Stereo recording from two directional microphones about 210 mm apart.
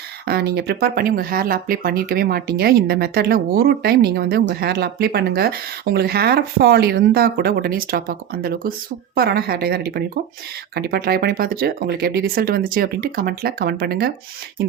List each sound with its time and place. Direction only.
0.3 s speech: 50° right (ahead or behind)